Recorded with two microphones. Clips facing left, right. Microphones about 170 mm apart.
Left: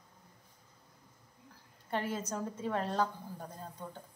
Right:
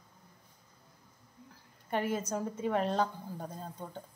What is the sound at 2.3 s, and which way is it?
Speech, 15° right (ahead or behind).